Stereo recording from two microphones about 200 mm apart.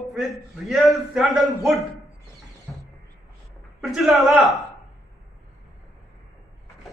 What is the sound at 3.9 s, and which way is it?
Speech, centre (ahead or behind).